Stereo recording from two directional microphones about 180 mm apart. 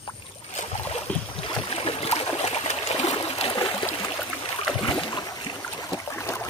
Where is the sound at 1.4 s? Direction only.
30° left (ahead or behind).